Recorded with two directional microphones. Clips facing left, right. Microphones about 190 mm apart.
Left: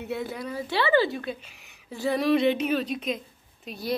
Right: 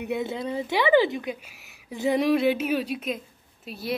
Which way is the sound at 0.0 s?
20° right (ahead or behind).